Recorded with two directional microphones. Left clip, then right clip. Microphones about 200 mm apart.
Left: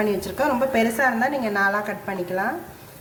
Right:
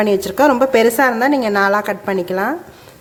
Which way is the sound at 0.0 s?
45° right (ahead or behind).